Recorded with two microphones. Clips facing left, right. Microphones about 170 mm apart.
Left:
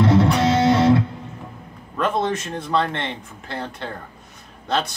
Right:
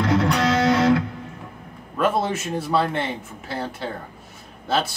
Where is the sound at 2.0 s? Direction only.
5° right (ahead or behind).